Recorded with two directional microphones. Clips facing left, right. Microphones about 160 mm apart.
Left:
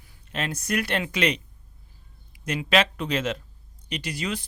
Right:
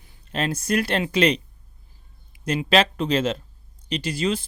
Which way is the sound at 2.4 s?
30° right (ahead or behind).